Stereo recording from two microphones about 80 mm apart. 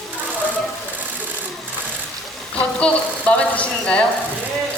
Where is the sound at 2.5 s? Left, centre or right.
Centre.